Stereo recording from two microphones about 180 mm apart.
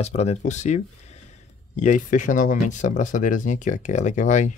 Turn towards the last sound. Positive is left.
turn(degrees=45)  # may be behind; listen again after turning